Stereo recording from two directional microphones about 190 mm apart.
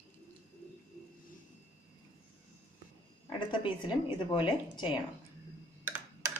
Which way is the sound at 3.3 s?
25° left (ahead or behind).